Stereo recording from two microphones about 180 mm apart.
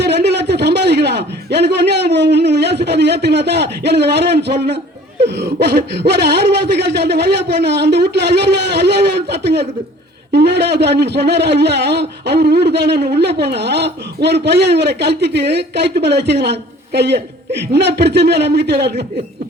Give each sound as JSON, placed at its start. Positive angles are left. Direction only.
{"t": 0.0, "sound": "a man's voice", "side_deg": -65}